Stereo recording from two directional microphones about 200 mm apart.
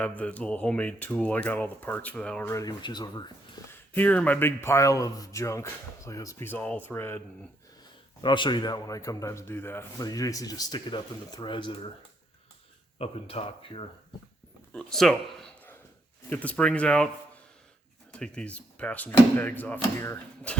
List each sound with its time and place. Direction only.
0.2 s speech: 5° left (ahead or behind)
3.9 s speech: 10° left (ahead or behind)
8.2 s a man's voice: 25° left (ahead or behind)
13.0 s a man's voice: 30° left (ahead or behind)
14.7 s a sound: 5° left (ahead or behind)
16.3 s speech: 5° left (ahead or behind)
18.1 s speech: 5° left (ahead or behind)